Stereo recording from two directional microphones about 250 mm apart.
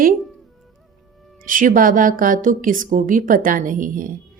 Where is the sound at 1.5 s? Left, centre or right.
Right.